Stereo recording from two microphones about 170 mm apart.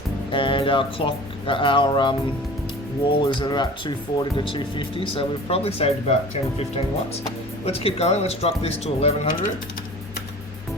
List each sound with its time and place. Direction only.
0.3 s speech: 30° left (ahead or behind)